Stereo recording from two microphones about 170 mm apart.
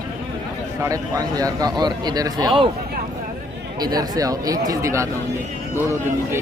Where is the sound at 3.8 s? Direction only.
20° right (ahead or behind).